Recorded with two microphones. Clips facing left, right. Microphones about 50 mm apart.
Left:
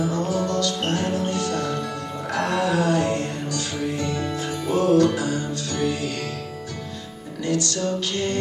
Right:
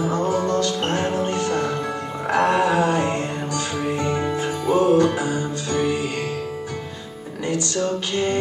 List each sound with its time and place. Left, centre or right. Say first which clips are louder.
0.0 s music: right 2 dB; right
7.4 s music: right 1 dB; right